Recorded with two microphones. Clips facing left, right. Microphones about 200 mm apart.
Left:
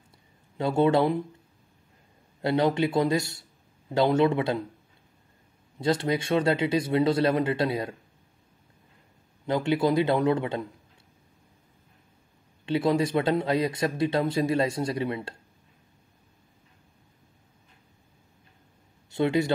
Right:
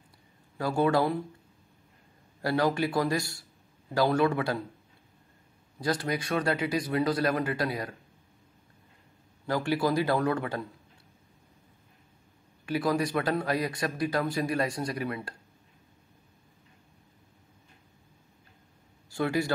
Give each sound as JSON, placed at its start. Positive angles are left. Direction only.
{"t": 0.6, "sound": "speech", "side_deg": 25}
{"t": 2.4, "sound": "speech", "side_deg": 20}
{"t": 5.8, "sound": "speech", "side_deg": 25}
{"t": 9.5, "sound": "speech", "side_deg": 20}
{"t": 12.6, "sound": "speech", "side_deg": 25}
{"t": 19.0, "sound": "speech", "side_deg": 20}